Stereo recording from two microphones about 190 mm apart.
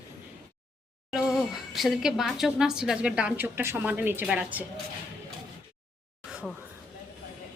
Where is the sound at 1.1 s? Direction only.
Centre (ahead or behind).